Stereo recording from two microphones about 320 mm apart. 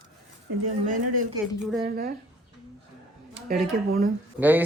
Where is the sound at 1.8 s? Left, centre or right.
Right.